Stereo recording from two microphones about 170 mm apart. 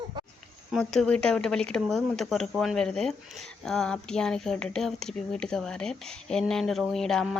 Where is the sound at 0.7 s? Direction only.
5° left (ahead or behind).